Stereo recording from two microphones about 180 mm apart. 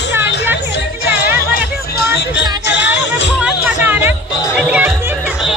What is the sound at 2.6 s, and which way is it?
Music, 75° left (ahead or behind).